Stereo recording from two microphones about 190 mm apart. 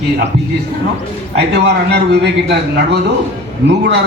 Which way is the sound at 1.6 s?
65° right (ahead or behind).